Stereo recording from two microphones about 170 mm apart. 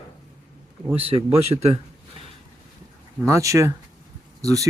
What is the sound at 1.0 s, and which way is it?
Speech, 35° right (ahead or behind).